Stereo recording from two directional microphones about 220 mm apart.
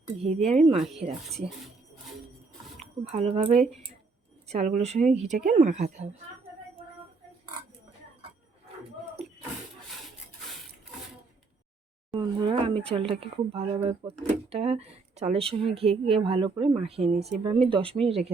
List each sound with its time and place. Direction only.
0.4 s speech: 30° right (ahead or behind)
0.8 s speech: centre (ahead or behind)
3.0 s a woman's voice: 30° right (ahead or behind)
12.1 s speech: 20° right (ahead or behind)